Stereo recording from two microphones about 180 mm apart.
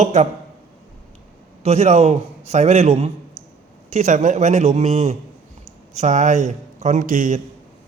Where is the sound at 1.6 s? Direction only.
40° right (ahead or behind).